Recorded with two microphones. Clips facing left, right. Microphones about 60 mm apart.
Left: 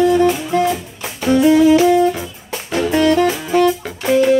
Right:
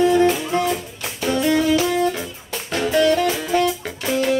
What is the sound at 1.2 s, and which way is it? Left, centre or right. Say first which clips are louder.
Music: left 7 dB; centre.